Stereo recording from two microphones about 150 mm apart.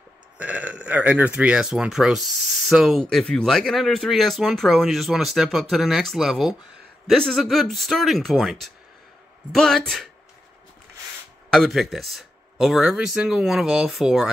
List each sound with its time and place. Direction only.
0.4 s speech: 10° right (ahead or behind)
11.5 s speech: centre (ahead or behind)